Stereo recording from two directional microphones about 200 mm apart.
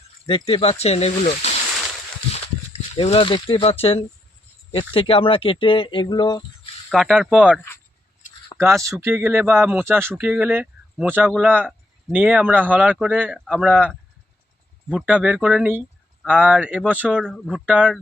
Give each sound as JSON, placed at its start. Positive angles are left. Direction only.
{"t": 0.3, "sound": "speech", "side_deg": 25}
{"t": 6.9, "sound": "speech", "side_deg": 0}
{"t": 8.5, "sound": "speech", "side_deg": -15}